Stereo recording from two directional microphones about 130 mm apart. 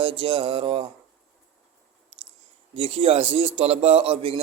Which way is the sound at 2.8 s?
45° right (ahead or behind).